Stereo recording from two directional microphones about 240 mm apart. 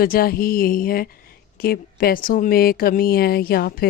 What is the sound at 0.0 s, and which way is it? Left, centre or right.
Speech, left.